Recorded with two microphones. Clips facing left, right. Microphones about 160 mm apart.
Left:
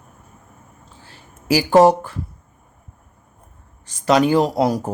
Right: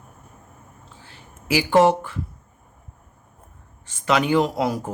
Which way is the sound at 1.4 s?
40° left (ahead or behind).